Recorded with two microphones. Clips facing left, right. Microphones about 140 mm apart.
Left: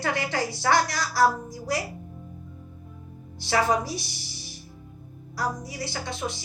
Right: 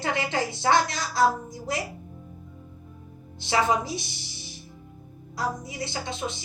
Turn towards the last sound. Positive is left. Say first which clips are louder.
# even
turn(degrees=-20)  # may be behind; listen again after turning